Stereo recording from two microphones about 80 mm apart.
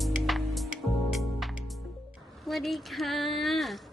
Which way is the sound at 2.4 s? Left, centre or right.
Centre.